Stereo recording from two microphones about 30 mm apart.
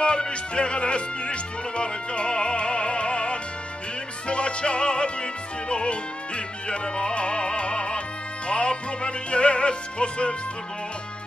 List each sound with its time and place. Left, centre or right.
0.0 s music: left